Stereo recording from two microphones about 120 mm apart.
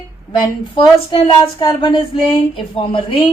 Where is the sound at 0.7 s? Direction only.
45° left (ahead or behind).